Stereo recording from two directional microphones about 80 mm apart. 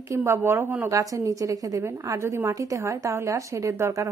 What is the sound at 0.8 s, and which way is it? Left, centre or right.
A woman's voice, right.